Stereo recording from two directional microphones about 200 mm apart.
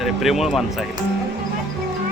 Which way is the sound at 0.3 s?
Centre (ahead or behind).